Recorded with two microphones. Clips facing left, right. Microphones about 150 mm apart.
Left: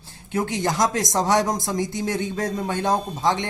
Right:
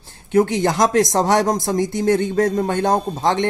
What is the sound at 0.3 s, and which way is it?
Speech, 55° right (ahead or behind).